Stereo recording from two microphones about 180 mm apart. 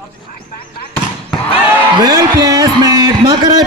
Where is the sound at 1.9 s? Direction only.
20° right (ahead or behind).